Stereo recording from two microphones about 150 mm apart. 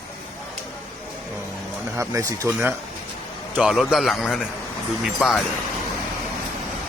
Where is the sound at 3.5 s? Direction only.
5° right (ahead or behind).